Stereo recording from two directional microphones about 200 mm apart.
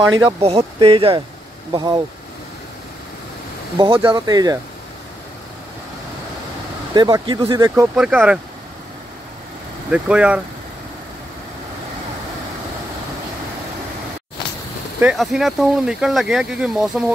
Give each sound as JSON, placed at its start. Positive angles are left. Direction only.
{"t": 0.4, "sound": "speech", "side_deg": -30}
{"t": 3.7, "sound": "speech", "side_deg": -25}
{"t": 6.9, "sound": "speech", "side_deg": -20}
{"t": 7.9, "sound": "speech", "side_deg": -5}
{"t": 9.8, "sound": "speech", "side_deg": -5}
{"t": 15.0, "sound": "speech", "side_deg": -5}